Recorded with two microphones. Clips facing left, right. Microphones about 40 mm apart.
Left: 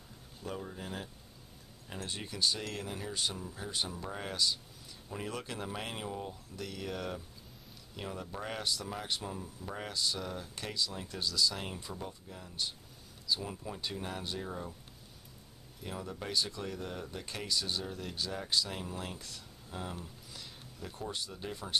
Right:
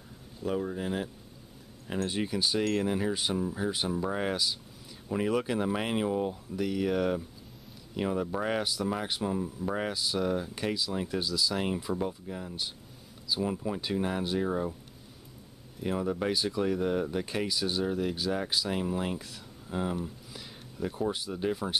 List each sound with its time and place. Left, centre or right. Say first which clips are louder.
0.5 s speech: right 10 dB; centre
2.1 s speech: right 4 dB; centre
6.5 s speech: right 12 dB; centre
9.9 s speech: right 7 dB; centre
11.9 s speech: right 11 dB; right
15.8 s speech: right 11 dB; right
17.5 s speech: right 6 dB; centre
20.3 s a sound: right 7 dB; centre
21.3 s speech: right 11 dB; centre